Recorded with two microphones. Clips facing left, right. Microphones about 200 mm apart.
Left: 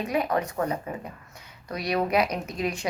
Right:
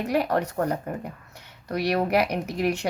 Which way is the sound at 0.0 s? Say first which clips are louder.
Right 2 dB; 75° right (ahead or behind).